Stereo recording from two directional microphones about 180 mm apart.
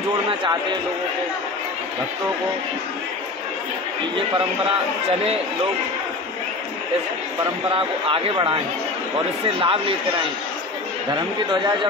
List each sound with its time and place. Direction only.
7.7 s speech: 30° right (ahead or behind)
9.6 s speech: 30° right (ahead or behind)